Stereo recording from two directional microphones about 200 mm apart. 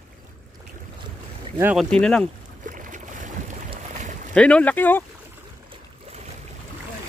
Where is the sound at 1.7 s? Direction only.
5° left (ahead or behind).